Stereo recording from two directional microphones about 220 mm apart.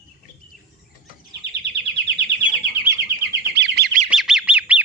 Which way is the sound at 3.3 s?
50° right (ahead or behind).